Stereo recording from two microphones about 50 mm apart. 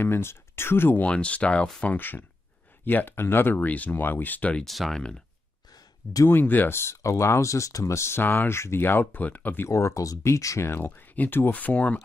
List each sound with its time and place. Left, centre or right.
0.0 s speech: left
1.0 s speech: left
2.0 s speech: left
3.6 s speech: left
4.6 s speech: centre
6.4 s speech: left
6.7 s speech: left
8.2 s speech: left
8.5 s speech: left
8.8 s speech: left
9.7 s speech: left
10.6 s speech: left
11.5 s speech: left